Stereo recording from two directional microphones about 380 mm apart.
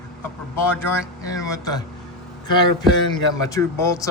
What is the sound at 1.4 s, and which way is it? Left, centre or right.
Speech, centre.